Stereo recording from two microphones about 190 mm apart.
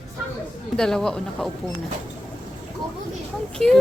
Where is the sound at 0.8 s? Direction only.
5° left (ahead or behind).